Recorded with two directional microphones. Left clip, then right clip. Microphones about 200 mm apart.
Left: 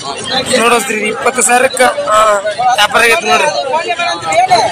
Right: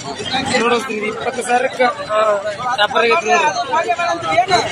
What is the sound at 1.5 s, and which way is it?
Speech, 5° left (ahead or behind).